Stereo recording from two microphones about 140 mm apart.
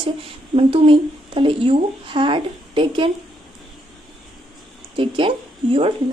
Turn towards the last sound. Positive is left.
turn(degrees=-40)  # may be behind; listen again after turning